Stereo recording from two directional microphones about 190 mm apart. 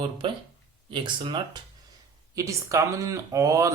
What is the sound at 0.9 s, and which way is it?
A man's voice, 25° right (ahead or behind).